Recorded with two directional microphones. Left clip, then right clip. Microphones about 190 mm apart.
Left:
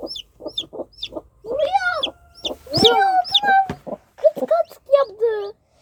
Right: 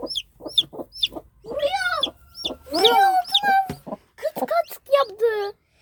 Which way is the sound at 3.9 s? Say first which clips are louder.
Left 4 dB; 50° right (ahead or behind).